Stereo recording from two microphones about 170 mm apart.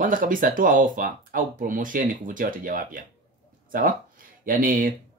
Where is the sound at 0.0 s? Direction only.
55° right (ahead or behind).